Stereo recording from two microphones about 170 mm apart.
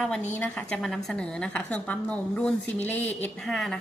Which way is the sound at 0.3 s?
5° left (ahead or behind).